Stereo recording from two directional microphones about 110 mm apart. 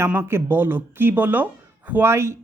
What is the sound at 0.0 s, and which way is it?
Speech, 25° right (ahead or behind).